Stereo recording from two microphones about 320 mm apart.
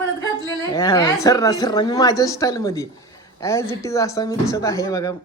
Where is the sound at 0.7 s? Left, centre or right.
Centre.